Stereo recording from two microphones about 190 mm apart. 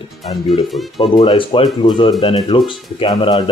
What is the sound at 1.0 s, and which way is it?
Speech, 25° left (ahead or behind).